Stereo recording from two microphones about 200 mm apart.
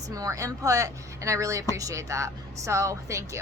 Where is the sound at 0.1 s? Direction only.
15° right (ahead or behind).